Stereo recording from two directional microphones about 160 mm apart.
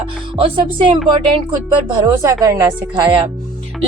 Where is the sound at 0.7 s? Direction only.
30° right (ahead or behind).